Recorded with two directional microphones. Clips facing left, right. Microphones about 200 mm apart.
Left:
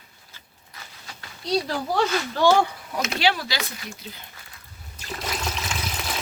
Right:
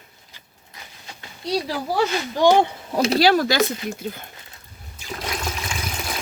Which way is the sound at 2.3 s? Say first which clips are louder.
Right 3 dB; 15° right (ahead or behind).